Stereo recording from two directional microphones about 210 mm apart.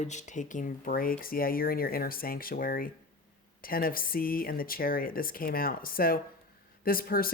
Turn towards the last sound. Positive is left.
turn(degrees=45)  # may be behind; listen again after turning